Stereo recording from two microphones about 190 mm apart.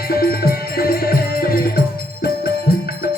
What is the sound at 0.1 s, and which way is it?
Music, 50° left (ahead or behind).